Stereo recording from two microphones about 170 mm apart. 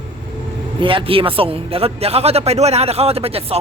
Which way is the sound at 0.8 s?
30° right (ahead or behind).